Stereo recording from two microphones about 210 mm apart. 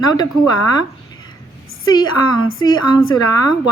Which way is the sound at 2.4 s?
75° left (ahead or behind).